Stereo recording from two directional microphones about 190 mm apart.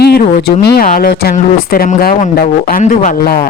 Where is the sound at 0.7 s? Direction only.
45° left (ahead or behind).